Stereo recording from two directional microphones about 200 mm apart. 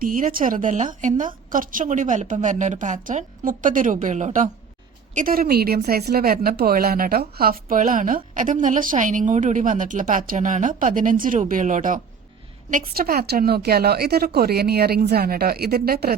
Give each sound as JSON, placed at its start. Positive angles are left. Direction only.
{"t": 0.0, "sound": "a woman's voice", "side_deg": -45}